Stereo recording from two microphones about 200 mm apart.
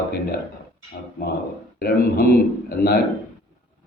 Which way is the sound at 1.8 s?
50° left (ahead or behind).